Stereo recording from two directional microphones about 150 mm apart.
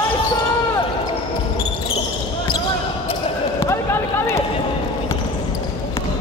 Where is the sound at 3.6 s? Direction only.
15° left (ahead or behind).